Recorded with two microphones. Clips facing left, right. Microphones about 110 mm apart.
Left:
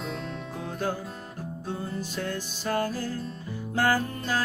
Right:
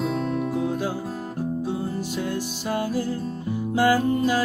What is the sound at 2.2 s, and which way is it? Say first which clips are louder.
Music: right 5 dB; 15° right (ahead or behind).